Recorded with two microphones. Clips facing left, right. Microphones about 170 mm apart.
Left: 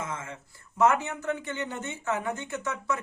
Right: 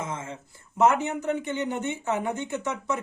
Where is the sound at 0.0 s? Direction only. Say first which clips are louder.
Right 2 dB; 20° right (ahead or behind).